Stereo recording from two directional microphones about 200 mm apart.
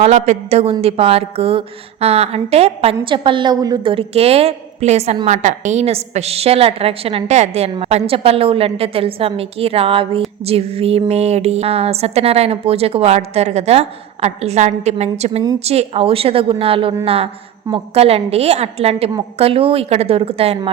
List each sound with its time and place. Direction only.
0.0 s a woman's voice: 35° right (ahead or behind)